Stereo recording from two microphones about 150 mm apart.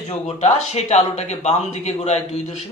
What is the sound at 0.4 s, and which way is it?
Speech, 45° left (ahead or behind).